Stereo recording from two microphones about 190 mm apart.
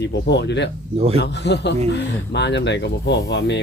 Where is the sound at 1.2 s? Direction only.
65° left (ahead or behind).